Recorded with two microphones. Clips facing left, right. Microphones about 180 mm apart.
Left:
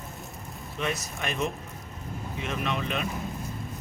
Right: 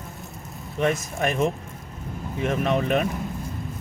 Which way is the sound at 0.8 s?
45° right (ahead or behind).